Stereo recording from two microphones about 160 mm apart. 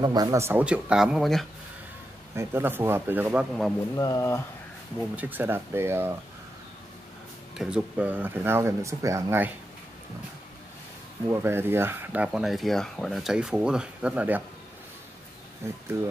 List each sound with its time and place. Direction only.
0.0 s speech: 25° right (ahead or behind); by 1.5 s centre (ahead or behind)
2.3 s speech: 15° right (ahead or behind)
3.9 s speech: 20° left (ahead or behind)
5.1 s speech: 10° right (ahead or behind)
7.5 s speech: 10° right (ahead or behind)
11.2 s speech: 15° right (ahead or behind)
15.6 s speech: 15° right (ahead or behind)